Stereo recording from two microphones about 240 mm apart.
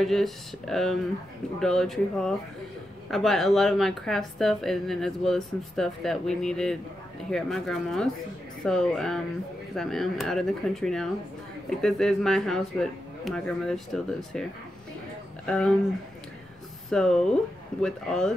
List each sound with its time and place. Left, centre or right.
0.0 s speech: centre
15.4 s speech: centre
16.9 s speech: centre